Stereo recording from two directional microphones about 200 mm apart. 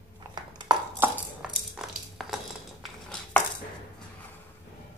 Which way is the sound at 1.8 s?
5° right (ahead or behind).